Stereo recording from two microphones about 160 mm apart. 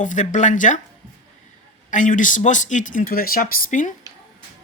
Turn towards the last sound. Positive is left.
turn(degrees=60)  # may be behind; listen again after turning